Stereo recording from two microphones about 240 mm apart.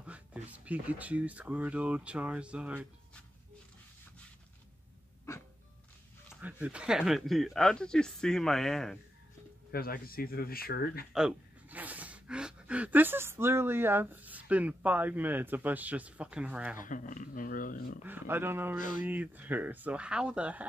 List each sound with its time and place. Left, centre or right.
0.0 s speech: centre
5.3 s a sound: centre
6.4 s speech: centre
9.7 s speech: left
11.1 s speech: centre
16.7 s speech: left
18.0 s speech: centre